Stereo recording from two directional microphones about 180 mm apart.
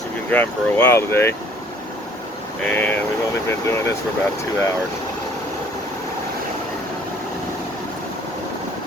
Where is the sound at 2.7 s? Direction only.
10° left (ahead or behind).